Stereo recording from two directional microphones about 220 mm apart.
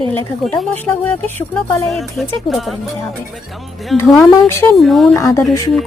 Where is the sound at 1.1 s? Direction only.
10° left (ahead or behind).